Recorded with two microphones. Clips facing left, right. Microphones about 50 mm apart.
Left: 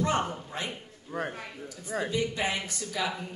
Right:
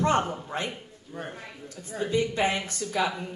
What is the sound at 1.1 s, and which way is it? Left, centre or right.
Speech, left.